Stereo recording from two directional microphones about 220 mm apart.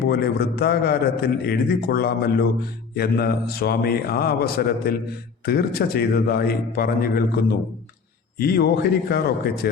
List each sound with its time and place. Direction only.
0.1 s a man's voice: 45° left (ahead or behind)
8.4 s a man's voice: 45° left (ahead or behind)